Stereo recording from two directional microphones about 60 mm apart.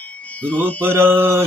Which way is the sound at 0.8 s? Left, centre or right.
Right.